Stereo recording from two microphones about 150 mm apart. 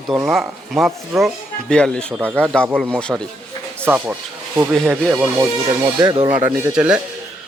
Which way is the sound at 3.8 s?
10° right (ahead or behind).